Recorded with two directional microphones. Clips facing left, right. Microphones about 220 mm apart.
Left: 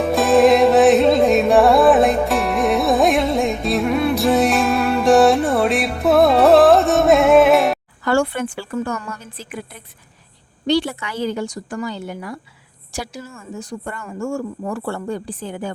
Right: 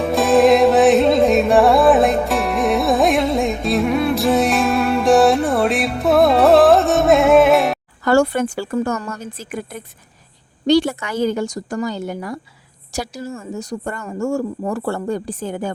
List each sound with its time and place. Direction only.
0.0 s music: centre (ahead or behind)
8.0 s a woman's voice: 40° right (ahead or behind)